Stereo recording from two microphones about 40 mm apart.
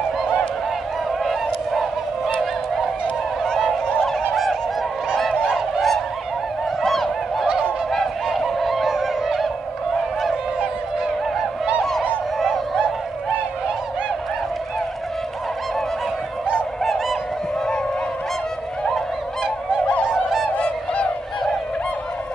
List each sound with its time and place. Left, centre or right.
1.2 s honk: centre
3.4 s goose: centre
4.0 s fowl: centre
6.8 s goose: centre
12.4 s a sound: centre
16.8 s bird: centre
20.1 s goose: centre
20.5 s honk: left